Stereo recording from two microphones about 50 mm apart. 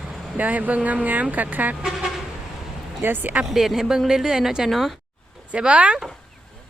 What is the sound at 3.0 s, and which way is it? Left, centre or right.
Speech, right.